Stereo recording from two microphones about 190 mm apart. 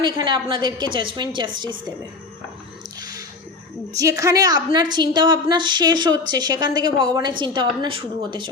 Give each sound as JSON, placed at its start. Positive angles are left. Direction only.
{"t": 0.0, "sound": "a woman's voice", "side_deg": -25}
{"t": 3.0, "sound": "squish", "side_deg": -20}
{"t": 3.9, "sound": "a woman's voice", "side_deg": -15}